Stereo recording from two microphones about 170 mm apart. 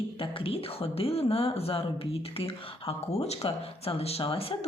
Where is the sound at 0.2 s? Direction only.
30° left (ahead or behind).